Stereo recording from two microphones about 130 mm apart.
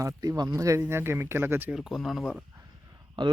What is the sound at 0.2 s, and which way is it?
Speech, 30° right (ahead or behind).